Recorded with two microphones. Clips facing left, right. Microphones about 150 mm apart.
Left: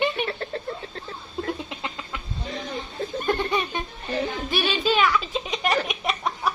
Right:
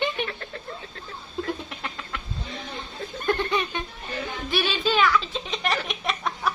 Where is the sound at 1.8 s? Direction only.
15° left (ahead or behind).